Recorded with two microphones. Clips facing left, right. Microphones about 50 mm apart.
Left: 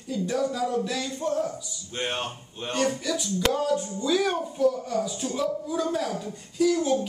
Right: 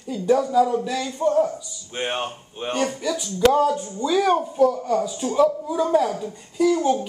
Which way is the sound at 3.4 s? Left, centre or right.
Centre.